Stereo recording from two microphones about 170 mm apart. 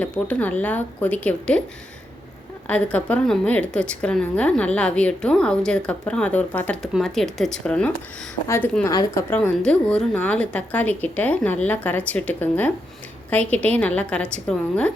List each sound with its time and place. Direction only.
0.0 s a woman's voice: 10° left (ahead or behind)
2.6 s a woman's voice: 10° left (ahead or behind)
9.3 s a woman's voice: 10° left (ahead or behind)